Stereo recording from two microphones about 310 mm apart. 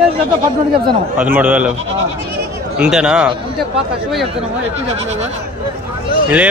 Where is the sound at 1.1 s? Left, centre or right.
Centre.